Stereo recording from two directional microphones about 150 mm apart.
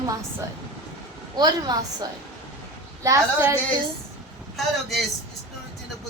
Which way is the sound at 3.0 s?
20° right (ahead or behind).